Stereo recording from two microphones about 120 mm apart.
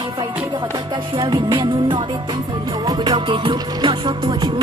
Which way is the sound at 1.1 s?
35° right (ahead or behind).